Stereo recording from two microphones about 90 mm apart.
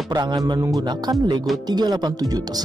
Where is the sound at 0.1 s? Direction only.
55° right (ahead or behind).